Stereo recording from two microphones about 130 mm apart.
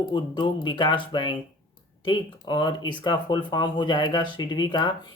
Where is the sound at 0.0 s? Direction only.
35° left (ahead or behind).